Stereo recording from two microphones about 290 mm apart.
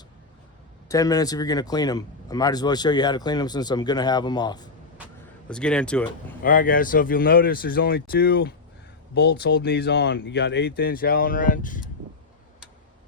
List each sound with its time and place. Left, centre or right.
0.9 s speech: centre
5.5 s speech: centre
6.4 s speech: left